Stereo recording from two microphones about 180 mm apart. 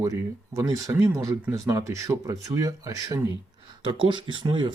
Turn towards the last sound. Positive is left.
turn(degrees=-25)  # may be behind; listen again after turning